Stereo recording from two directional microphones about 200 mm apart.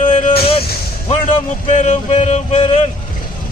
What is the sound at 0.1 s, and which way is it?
Vehicle, 35° left (ahead or behind).